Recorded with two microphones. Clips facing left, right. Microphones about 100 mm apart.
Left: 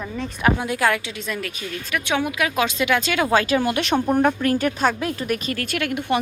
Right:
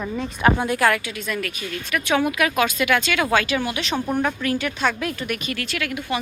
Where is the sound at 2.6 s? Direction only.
25° left (ahead or behind); by 4.0 s 50° left (ahead or behind).